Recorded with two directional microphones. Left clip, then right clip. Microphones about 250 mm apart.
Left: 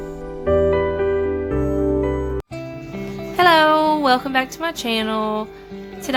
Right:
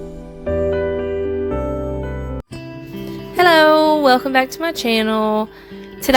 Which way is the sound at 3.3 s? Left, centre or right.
Centre.